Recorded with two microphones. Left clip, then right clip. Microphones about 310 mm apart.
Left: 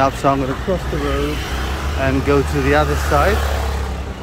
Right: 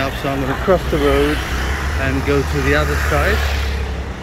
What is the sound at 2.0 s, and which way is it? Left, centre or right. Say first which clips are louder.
Speech: left 3 dB; centre.